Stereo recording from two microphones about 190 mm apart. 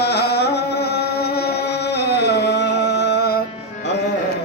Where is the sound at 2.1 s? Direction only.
60° left (ahead or behind).